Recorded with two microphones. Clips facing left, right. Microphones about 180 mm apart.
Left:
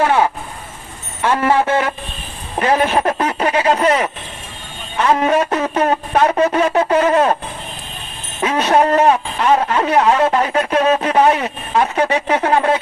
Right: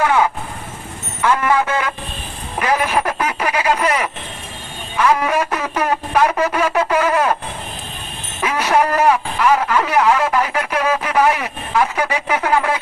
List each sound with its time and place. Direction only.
0.0 s vehicle: 25° left (ahead or behind)
1.2 s speech: 30° left (ahead or behind)
8.4 s speech: 25° left (ahead or behind)